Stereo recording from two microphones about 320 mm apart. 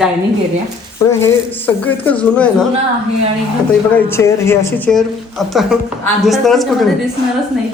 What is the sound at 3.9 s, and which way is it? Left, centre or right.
A woman's voice, centre.